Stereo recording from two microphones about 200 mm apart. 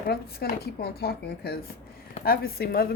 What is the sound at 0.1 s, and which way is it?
Speech, 50° left (ahead or behind).